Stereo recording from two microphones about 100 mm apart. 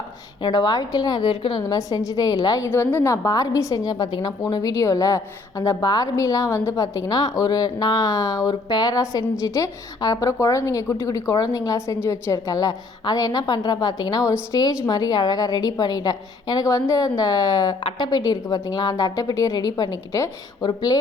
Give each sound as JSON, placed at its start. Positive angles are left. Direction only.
{"t": 0.4, "sound": "a woman's voice", "side_deg": 45}
{"t": 1.6, "sound": "a woman's voice", "side_deg": 35}
{"t": 2.6, "sound": "a woman's voice", "side_deg": 20}